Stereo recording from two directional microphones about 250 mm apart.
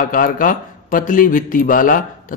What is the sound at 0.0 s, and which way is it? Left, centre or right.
Speech, left.